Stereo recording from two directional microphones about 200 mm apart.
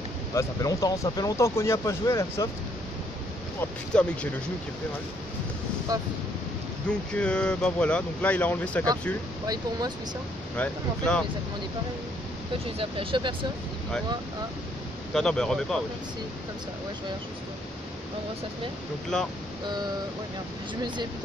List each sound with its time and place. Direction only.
0.3 s speech: 15° left (ahead or behind)
3.9 s speech: 5° left (ahead or behind)
5.9 s speech: 15° right (ahead or behind)
7.2 s speech: 5° left (ahead or behind)
9.5 s speech: 20° right (ahead or behind)
10.6 s speech: 5° left (ahead or behind)
12.6 s speech: 25° right (ahead or behind)
15.1 s speech: 5° left (ahead or behind)
19.1 s speech: 5° left (ahead or behind)